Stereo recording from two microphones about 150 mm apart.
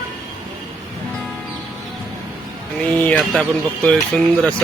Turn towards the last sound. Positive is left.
turn(degrees=5)  # may be behind; listen again after turning